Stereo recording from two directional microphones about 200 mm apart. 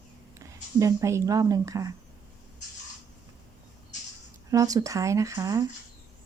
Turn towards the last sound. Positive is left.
turn(degrees=-15)  # may be behind; listen again after turning